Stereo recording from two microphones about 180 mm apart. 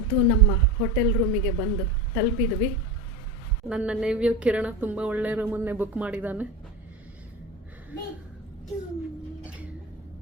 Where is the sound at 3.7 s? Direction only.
5° right (ahead or behind).